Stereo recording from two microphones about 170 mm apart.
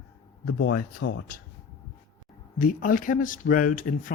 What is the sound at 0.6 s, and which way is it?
Speech, 70° left (ahead or behind).